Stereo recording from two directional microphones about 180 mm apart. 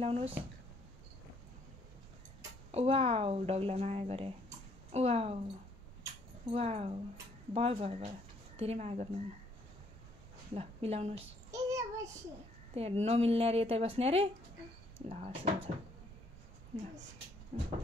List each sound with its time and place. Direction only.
0.0 s speech: 35° right (ahead or behind)
2.7 s speech: 35° right (ahead or behind)
6.5 s speech: 35° right (ahead or behind)
10.5 s speech: 35° right (ahead or behind)
11.5 s child singing: 20° right (ahead or behind)
12.7 s speech: 35° right (ahead or behind)
17.5 s speech: 35° right (ahead or behind)